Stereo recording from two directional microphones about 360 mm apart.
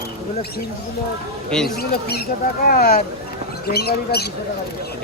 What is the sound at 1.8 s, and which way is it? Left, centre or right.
Speech, left.